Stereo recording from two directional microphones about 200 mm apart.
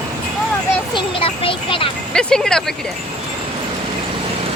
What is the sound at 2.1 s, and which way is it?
Speech, 5° left (ahead or behind).